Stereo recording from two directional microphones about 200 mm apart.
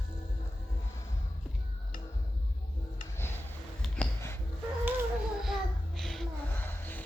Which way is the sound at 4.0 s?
10° left (ahead or behind).